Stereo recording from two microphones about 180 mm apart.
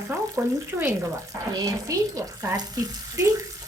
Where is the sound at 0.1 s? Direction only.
15° right (ahead or behind).